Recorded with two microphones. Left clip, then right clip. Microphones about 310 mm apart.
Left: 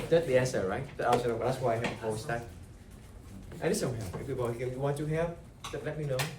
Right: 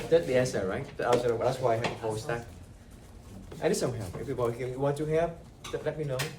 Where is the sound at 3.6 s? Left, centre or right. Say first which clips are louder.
Right 3 dB; centre.